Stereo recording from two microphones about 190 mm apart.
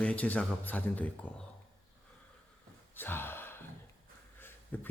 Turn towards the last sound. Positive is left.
turn(degrees=10)  # may be behind; listen again after turning